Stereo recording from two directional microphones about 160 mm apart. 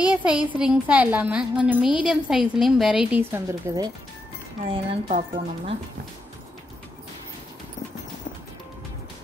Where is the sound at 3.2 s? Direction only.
15° right (ahead or behind).